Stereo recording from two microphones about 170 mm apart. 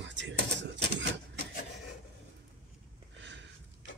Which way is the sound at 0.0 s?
90° right.